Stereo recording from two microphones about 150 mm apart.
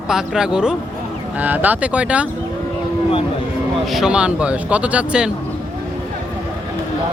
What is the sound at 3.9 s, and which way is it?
Speech, 5° right (ahead or behind).